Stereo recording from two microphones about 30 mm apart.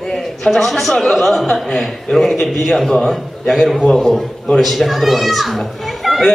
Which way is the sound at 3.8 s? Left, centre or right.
Left.